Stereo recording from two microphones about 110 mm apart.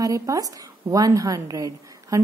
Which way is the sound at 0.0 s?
30° right (ahead or behind).